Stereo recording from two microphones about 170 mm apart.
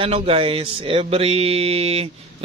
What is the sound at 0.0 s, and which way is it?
Speech, 35° right (ahead or behind).